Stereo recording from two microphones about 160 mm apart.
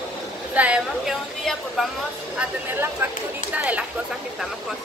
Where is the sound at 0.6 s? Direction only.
5° right (ahead or behind).